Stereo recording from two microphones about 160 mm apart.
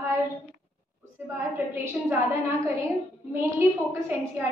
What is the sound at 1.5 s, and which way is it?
Speech, 15° right (ahead or behind).